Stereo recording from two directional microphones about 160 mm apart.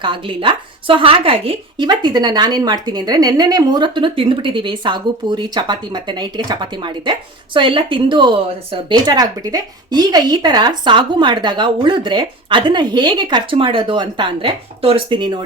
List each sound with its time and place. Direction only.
0.0 s a woman's voice: 30° right (ahead or behind)